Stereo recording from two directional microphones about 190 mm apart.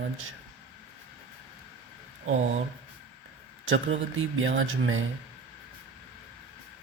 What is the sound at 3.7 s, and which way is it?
Speech, 90° right.